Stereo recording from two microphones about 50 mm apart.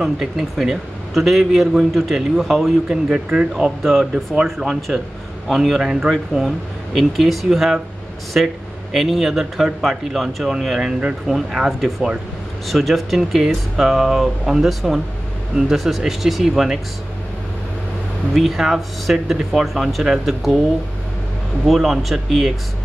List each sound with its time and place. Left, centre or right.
0.0 s a man's voice: centre
2.9 s speech: centre
3.8 s a man's voice: centre
4.6 s a man's voice: centre
18.3 s a man's voice: centre
21.6 s a man's voice: centre